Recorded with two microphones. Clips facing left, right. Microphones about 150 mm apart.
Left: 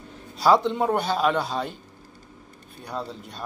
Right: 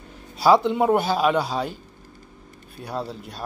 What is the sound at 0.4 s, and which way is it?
Speech, 5° right (ahead or behind).